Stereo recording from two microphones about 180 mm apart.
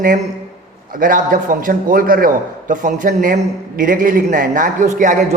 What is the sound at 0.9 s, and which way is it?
A man's voice, 50° right (ahead or behind).